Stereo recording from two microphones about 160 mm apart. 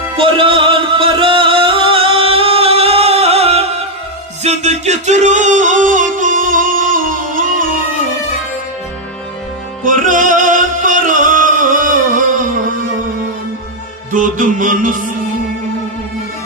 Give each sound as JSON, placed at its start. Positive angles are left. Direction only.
{"t": 0.2, "sound": "music", "side_deg": -30}
{"t": 9.8, "sound": "music", "side_deg": -55}
{"t": 14.1, "sound": "music", "side_deg": -55}